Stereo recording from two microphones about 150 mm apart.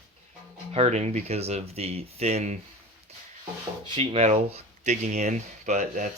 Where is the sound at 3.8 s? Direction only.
35° right (ahead or behind); by 6.1 s 60° right (ahead or behind).